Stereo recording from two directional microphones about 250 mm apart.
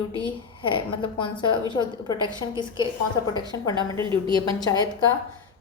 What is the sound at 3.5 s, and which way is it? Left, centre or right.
Speech, centre.